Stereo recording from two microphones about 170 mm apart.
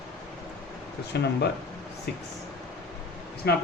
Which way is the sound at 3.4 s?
75° left (ahead or behind).